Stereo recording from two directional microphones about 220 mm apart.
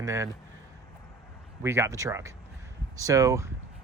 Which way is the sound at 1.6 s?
10° right (ahead or behind).